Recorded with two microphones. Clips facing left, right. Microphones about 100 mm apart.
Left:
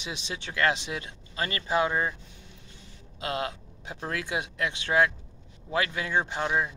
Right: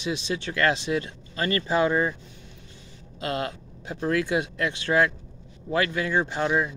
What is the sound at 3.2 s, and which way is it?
Speech, 15° left (ahead or behind).